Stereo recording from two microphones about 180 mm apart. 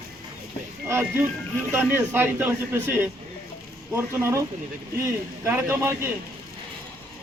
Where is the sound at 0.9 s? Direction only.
15° right (ahead or behind).